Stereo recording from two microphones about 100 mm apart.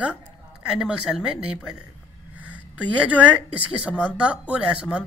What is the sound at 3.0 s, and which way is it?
Speech, 15° right (ahead or behind).